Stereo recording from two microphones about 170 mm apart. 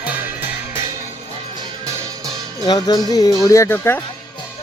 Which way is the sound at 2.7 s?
25° left (ahead or behind).